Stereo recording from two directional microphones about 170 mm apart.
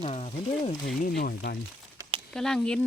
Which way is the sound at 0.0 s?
40° left (ahead or behind).